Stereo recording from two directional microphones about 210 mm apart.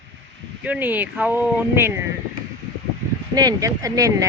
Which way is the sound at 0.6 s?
5° right (ahead or behind).